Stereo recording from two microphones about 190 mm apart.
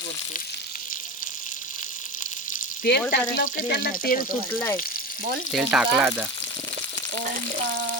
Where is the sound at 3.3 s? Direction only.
45° left (ahead or behind).